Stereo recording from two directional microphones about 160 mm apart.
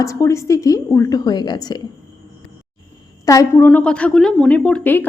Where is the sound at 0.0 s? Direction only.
20° left (ahead or behind).